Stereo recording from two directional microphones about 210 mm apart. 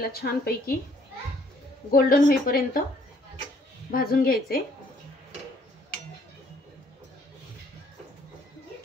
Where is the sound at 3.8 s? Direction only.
45° left (ahead or behind).